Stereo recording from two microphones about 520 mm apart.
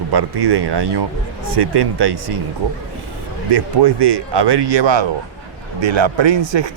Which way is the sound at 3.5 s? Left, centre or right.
Right.